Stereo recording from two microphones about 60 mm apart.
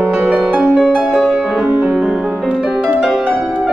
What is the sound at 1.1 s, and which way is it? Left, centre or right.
Music, centre.